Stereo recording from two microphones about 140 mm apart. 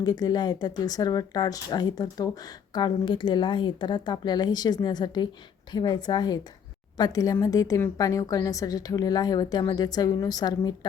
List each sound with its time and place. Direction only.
0.0 s speech: 30° left (ahead or behind)